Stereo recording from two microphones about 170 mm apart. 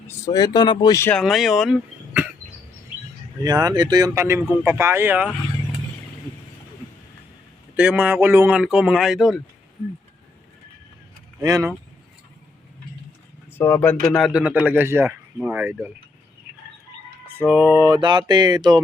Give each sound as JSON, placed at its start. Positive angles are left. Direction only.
{"t": 0.3, "sound": "speech", "side_deg": 25}
{"t": 1.1, "sound": "speech", "side_deg": 0}
{"t": 3.4, "sound": "speech", "side_deg": -20}
{"t": 7.8, "sound": "speech", "side_deg": -10}
{"t": 11.3, "sound": "speech", "side_deg": -20}
{"t": 13.6, "sound": "speech", "side_deg": 10}
{"t": 14.2, "sound": "speech", "side_deg": -5}
{"t": 17.5, "sound": "a sound", "side_deg": -15}